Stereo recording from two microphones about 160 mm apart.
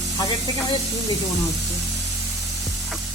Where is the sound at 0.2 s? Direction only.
25° left (ahead or behind).